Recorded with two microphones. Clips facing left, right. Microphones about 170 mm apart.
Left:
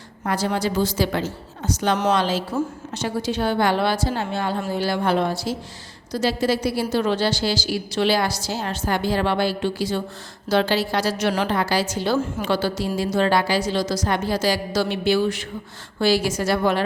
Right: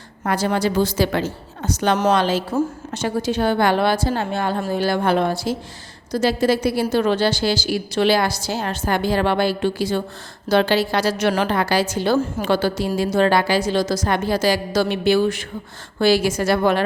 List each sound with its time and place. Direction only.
0.3 s a woman's voice: 60° right (ahead or behind)